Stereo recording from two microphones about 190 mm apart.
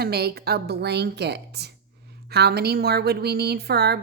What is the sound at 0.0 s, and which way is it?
A woman's voice, 55° right (ahead or behind).